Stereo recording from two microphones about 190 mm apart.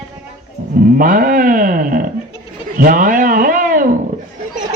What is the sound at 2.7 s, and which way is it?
Speech, 45° right (ahead or behind).